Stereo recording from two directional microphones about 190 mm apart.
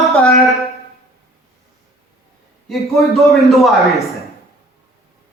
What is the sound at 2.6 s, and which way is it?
A man's voice, centre (ahead or behind).